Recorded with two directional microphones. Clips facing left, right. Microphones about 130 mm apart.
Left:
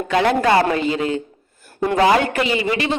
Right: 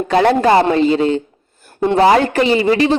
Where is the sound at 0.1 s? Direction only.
35° right (ahead or behind).